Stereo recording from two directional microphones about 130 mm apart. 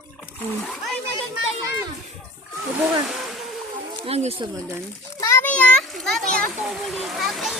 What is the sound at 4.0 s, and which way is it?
Speech, 50° right (ahead or behind).